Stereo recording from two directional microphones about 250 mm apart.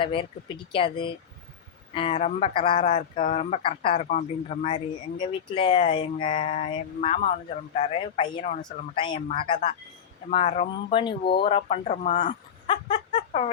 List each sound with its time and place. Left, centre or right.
0.0 s speech: left